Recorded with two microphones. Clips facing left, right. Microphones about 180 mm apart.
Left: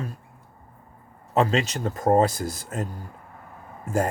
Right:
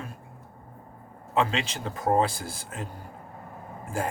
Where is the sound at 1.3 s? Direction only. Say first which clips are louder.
Left 4 dB; 40° left (ahead or behind).